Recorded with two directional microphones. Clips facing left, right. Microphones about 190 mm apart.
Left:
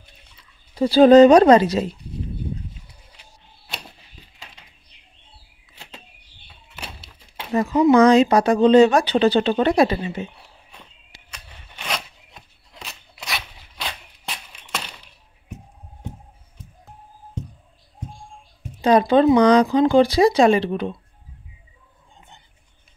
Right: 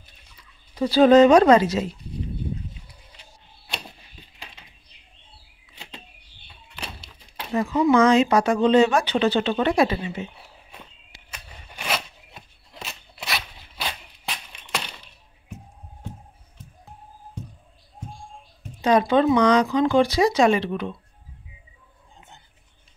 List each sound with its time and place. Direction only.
0.7 s speech: 30° left (ahead or behind)
7.5 s speech: 40° left (ahead or behind)
10.7 s a sound: 5° right (ahead or behind)
18.8 s speech: 35° left (ahead or behind)